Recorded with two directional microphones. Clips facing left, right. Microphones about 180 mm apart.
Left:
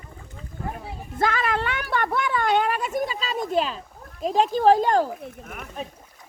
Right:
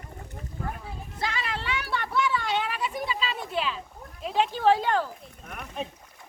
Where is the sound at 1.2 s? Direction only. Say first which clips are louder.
Left 8 dB; 55° left (ahead or behind).